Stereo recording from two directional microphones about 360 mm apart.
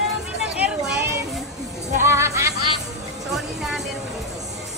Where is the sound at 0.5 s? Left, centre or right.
Centre.